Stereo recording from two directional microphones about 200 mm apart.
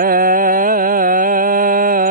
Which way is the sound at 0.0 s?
45° right (ahead or behind).